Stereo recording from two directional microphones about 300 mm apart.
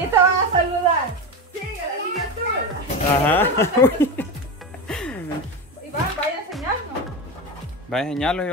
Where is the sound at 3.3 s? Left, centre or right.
Centre.